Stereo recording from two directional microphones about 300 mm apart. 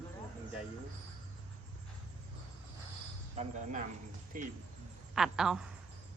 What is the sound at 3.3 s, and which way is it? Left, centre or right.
Speech, right.